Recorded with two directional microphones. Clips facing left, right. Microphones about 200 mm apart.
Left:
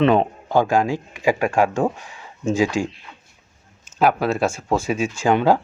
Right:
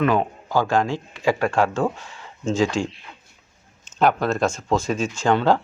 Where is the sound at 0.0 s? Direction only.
25° left (ahead or behind).